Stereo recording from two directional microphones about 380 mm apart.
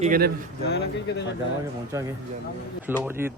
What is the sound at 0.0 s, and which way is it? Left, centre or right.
Speech, right.